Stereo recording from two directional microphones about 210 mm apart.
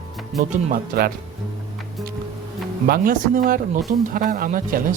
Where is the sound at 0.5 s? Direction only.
45° right (ahead or behind).